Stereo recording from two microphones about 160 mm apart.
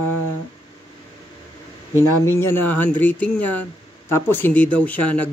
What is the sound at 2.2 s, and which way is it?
Speech, 15° left (ahead or behind).